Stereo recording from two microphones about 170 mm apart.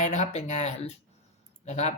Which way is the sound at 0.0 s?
45° left (ahead or behind).